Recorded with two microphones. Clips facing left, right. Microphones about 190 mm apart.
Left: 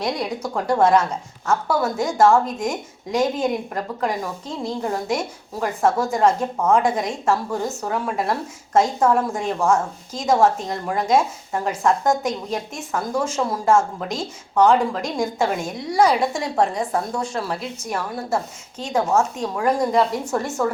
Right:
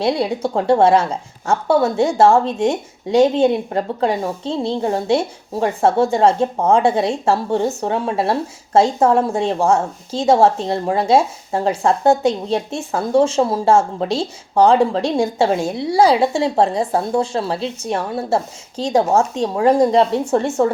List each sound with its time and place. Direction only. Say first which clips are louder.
0.0 s a woman's voice: right 6 dB; 30° right (ahead or behind)